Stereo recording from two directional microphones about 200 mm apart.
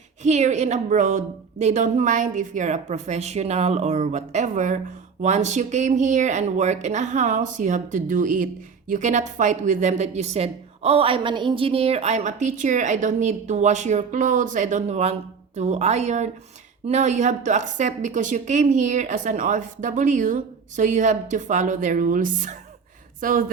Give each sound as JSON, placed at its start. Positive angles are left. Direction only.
{"t": 0.2, "sound": "a woman's voice", "side_deg": -35}